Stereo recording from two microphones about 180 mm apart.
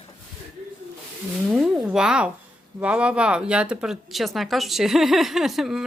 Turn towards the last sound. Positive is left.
turn(degrees=0)  # may be behind; listen again after turning